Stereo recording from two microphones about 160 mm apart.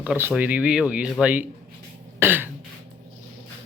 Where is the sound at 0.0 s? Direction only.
10° right (ahead or behind).